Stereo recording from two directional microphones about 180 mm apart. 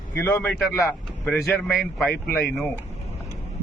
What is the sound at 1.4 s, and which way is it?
A man's voice, centre (ahead or behind).